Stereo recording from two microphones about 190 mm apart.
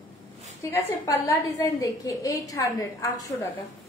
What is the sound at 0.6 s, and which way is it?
A woman's voice, 15° left (ahead or behind).